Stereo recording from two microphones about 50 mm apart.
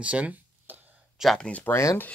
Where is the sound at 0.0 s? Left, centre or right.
Right.